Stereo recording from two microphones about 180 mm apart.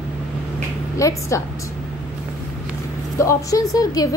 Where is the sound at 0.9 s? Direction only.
20° left (ahead or behind).